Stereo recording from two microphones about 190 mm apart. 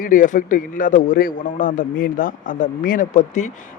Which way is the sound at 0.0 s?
45° left (ahead or behind).